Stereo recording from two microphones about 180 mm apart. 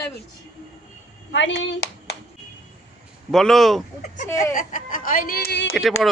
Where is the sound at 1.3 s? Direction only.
90° left.